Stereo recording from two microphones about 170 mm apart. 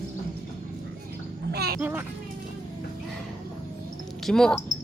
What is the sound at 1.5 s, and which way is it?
Music, 70° right (ahead or behind).